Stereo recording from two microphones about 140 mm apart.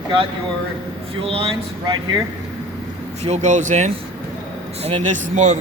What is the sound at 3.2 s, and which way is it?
Speech, 55° right (ahead or behind).